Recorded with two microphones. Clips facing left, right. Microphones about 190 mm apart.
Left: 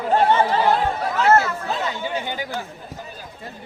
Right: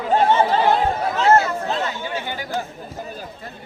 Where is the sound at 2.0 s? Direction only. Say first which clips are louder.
Left 1 dB; 15° left (ahead or behind).